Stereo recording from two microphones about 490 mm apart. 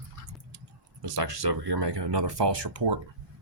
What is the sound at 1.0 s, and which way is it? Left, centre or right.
Speech, right.